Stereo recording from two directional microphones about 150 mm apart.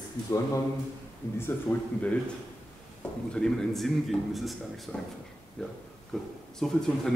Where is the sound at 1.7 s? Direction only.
10° left (ahead or behind).